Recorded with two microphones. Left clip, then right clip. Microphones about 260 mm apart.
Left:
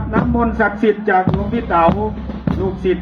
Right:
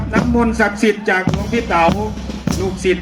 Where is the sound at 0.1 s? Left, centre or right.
Right.